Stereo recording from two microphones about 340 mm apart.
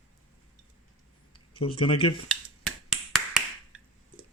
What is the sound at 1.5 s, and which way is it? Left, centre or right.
Speech, centre.